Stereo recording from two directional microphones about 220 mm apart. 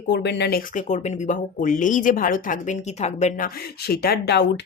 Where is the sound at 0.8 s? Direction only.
35° left (ahead or behind).